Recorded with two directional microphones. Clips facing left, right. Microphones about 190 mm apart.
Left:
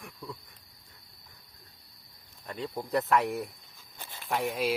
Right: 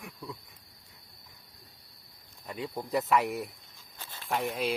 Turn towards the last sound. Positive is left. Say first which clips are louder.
# left 1 dB
turn(degrees=0)  # may be behind; listen again after turning